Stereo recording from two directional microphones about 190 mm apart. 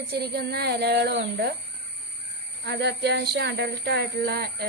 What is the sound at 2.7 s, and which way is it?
Speech, 60° right (ahead or behind).